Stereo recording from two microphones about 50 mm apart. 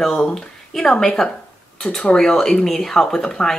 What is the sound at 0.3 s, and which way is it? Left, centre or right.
A woman's voice, centre.